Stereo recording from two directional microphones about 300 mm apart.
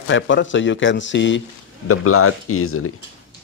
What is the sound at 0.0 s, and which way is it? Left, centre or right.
Speech, left.